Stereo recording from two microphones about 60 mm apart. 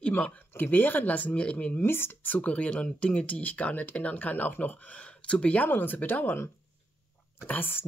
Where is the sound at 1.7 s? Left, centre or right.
Left.